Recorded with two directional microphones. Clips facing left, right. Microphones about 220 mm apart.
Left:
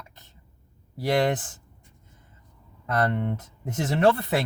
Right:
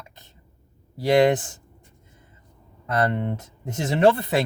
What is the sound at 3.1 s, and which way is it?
Speech, 25° right (ahead or behind).